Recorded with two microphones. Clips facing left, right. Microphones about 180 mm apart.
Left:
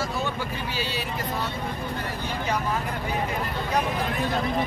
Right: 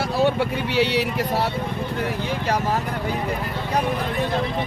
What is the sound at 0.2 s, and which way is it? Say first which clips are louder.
Speech: right 9 dB; 70° right (ahead or behind).